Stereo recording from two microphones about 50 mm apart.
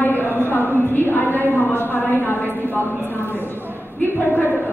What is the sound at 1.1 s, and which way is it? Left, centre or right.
Speech, left.